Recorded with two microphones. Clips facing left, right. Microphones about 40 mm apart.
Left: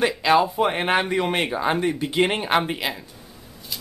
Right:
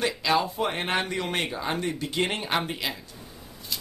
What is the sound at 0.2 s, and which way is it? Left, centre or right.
Speech, left.